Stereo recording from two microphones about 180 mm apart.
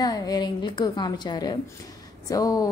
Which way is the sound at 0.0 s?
20° left (ahead or behind).